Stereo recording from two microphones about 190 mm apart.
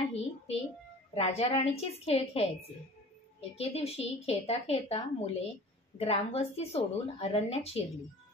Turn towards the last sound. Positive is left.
turn(degrees=30)  # may be behind; listen again after turning